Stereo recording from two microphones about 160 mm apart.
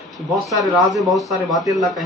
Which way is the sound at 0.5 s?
Centre (ahead or behind).